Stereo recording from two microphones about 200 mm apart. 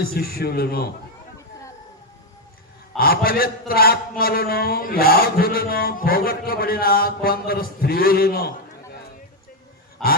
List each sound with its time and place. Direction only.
0.0 s mantra: 50° left (ahead or behind)
3.0 s mantra: 50° left (ahead or behind)
10.0 s grunt: centre (ahead or behind)